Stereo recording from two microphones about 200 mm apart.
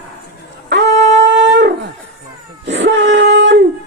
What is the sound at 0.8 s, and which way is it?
Wind instrument, 35° right (ahead or behind).